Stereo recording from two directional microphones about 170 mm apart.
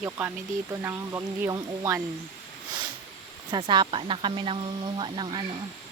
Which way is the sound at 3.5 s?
30° right (ahead or behind).